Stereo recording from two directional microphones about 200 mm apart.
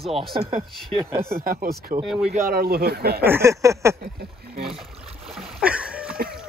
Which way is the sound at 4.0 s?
50° right (ahead or behind).